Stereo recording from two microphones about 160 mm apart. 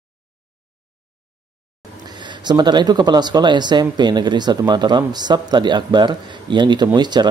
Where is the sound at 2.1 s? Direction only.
30° right (ahead or behind).